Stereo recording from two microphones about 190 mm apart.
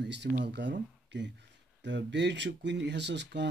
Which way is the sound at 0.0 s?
65° right (ahead or behind).